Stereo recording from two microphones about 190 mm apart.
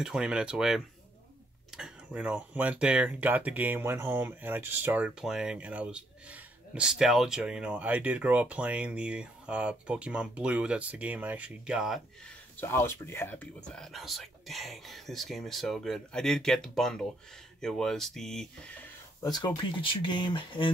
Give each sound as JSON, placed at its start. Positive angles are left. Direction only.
{"t": 0.0, "sound": "speech", "side_deg": -5}
{"t": 12.5, "sound": "speech", "side_deg": 15}
{"t": 19.3, "sound": "speech", "side_deg": 20}